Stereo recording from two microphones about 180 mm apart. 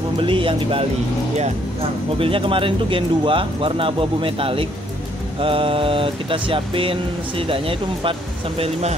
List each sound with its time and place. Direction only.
0.2 s speech: 30° right (ahead or behind)